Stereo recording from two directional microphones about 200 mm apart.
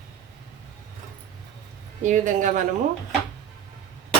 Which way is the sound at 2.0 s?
40° right (ahead or behind).